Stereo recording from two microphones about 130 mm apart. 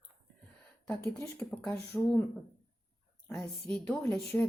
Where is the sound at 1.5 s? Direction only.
10° left (ahead or behind).